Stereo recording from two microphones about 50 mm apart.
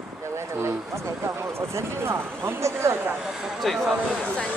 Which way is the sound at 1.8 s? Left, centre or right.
Right.